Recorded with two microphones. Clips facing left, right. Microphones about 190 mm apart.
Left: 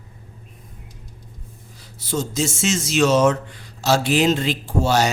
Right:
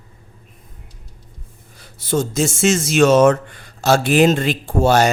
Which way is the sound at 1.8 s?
55° right (ahead or behind).